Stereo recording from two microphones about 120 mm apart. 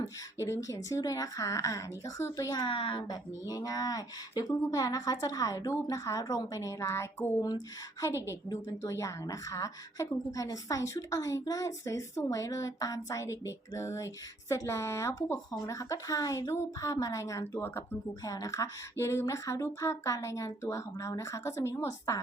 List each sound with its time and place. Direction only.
0.0 s a woman's voice: 25° left (ahead or behind)
8.8 s a woman's voice: 25° left (ahead or behind)